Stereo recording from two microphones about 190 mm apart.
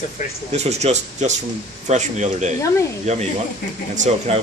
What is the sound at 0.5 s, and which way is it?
Speech, 35° right (ahead or behind).